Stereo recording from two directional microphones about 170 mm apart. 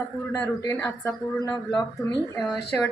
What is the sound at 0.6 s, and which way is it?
Speech, 15° left (ahead or behind).